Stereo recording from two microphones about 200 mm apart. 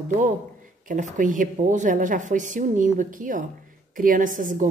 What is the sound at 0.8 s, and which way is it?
A woman's voice, 40° right (ahead or behind).